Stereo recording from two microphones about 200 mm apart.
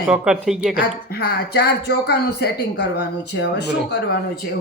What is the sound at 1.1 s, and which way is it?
A woman's voice, 50° left (ahead or behind).